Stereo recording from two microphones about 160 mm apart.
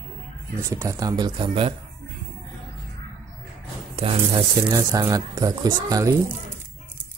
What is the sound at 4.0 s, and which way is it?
Speech, 35° right (ahead or behind).